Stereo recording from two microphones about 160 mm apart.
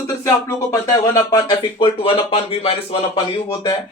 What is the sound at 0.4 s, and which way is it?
Speech, 20° left (ahead or behind).